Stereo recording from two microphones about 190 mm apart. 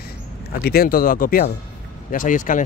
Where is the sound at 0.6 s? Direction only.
50° left (ahead or behind).